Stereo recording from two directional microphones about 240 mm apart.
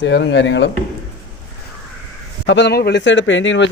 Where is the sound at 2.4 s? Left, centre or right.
Left.